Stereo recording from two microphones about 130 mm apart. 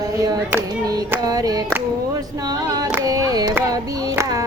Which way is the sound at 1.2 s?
30° right (ahead or behind).